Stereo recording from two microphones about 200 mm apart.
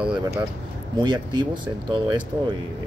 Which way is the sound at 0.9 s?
25° right (ahead or behind).